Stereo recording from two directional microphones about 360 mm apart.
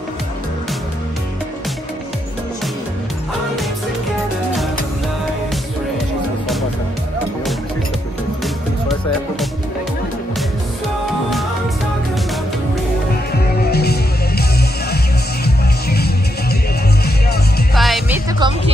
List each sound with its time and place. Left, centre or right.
13.3 s music: left
15.4 s music: left
17.7 s music: centre